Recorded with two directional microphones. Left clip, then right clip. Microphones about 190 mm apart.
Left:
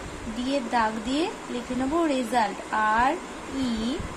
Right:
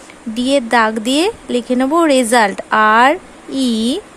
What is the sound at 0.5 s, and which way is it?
Speech, 60° right (ahead or behind).